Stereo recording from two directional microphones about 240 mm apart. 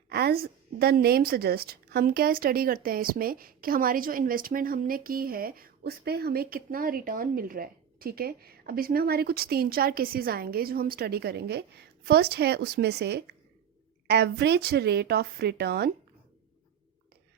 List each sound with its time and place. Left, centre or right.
0.1 s a woman's voice: right